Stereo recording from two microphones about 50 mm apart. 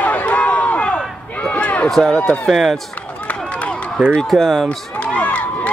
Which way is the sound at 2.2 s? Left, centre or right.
Left.